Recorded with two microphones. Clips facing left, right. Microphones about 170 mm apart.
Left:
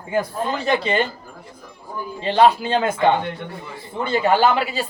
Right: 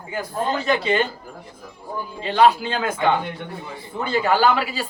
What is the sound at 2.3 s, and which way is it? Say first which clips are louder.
Speech: left 1 dB; 30° left (ahead or behind).